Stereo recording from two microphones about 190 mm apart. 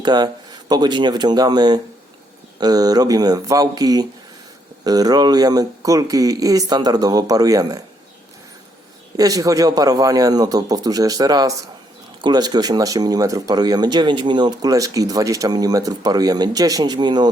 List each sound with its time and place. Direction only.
0.0 s speech: 20° right (ahead or behind)
9.1 s speech: 20° right (ahead or behind)